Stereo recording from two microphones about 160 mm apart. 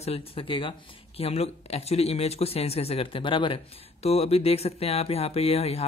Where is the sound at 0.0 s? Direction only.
35° left (ahead or behind).